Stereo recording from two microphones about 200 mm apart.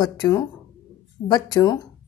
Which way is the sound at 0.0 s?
20° left (ahead or behind).